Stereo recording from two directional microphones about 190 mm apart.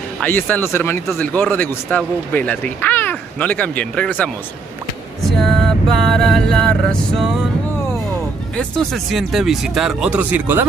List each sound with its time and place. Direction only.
0.2 s speech: 10° left (ahead or behind)
8.5 s speech: 5° left (ahead or behind)